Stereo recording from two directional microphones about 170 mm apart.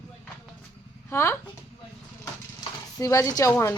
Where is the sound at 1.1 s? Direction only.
15° left (ahead or behind).